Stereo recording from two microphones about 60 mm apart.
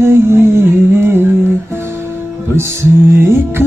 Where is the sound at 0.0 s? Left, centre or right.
Right.